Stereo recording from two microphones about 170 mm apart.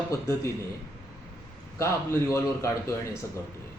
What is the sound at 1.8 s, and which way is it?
A man's voice, 15° left (ahead or behind).